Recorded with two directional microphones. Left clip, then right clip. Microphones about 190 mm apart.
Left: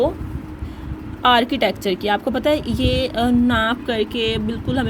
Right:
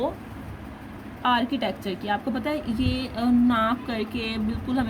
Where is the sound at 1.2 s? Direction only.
35° left (ahead or behind).